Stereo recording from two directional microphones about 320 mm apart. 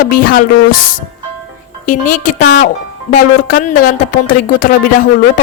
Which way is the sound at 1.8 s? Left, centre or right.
Left.